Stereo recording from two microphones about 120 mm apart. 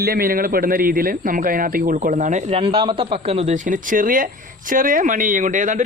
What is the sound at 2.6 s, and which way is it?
A man's voice, 45° right (ahead or behind).